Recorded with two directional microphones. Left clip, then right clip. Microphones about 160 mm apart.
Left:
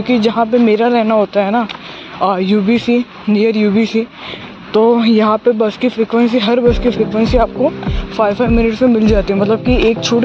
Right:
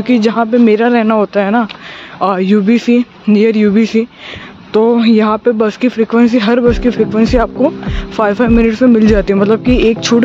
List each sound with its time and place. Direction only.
0.0 s speech: 45° right (ahead or behind)
4.7 s speech: 35° right (ahead or behind)
5.6 s speech: 45° right (ahead or behind)